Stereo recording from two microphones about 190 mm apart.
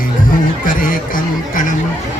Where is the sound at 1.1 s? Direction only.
45° left (ahead or behind).